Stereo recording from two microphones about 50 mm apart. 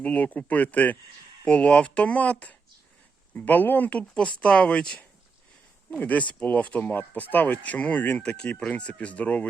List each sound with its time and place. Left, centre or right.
0.0 s speech: left
6.0 s speech: left
8.2 s speech: centre